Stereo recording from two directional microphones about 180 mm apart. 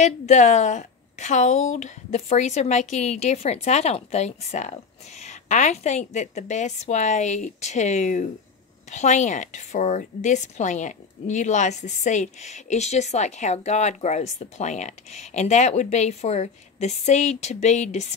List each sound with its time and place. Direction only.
0.0 s a woman's voice: 40° left (ahead or behind)